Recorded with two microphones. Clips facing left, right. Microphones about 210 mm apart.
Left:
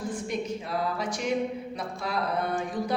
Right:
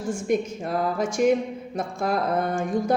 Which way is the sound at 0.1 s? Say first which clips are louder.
Right 11 dB; 45° right (ahead or behind).